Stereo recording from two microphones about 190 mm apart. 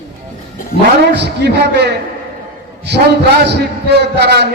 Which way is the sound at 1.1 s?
60° right (ahead or behind).